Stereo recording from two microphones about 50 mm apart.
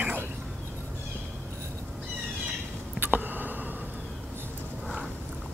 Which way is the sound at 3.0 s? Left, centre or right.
Right.